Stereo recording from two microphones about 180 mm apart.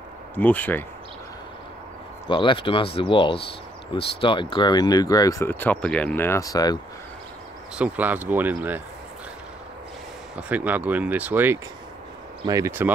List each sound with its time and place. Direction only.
0.4 s speech: 10° left (ahead or behind)
2.2 s speech: 25° left (ahead or behind)
7.7 s speech: 5° right (ahead or behind)
10.3 s speech: 10° right (ahead or behind)